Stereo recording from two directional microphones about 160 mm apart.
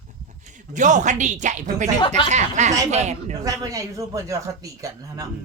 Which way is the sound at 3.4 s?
20° right (ahead or behind).